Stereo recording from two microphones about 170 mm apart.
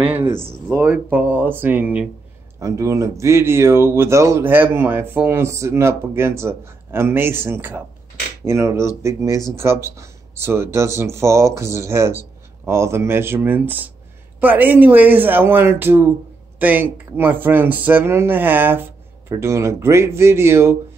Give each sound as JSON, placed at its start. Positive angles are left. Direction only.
{"t": 0.0, "sound": "speech", "side_deg": -10}